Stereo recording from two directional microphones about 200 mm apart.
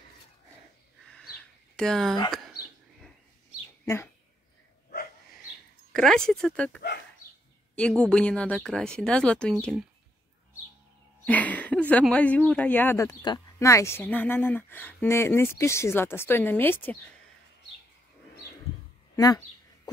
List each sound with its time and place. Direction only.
1.8 s speech: centre (ahead or behind)
3.8 s speech: 15° left (ahead or behind)
5.9 s speech: 5° left (ahead or behind)
11.2 s a sound: 5° left (ahead or behind)
12.1 s speech: 5° left (ahead or behind)
19.1 s speech: 20° left (ahead or behind)